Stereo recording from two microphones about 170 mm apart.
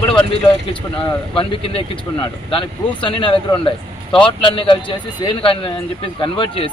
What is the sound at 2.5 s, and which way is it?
A man's voice, 30° left (ahead or behind).